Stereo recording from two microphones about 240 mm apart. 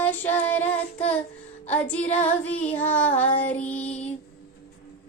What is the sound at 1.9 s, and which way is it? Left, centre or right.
Child singing, centre.